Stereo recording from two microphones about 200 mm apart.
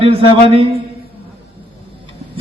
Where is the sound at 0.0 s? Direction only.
30° right (ahead or behind).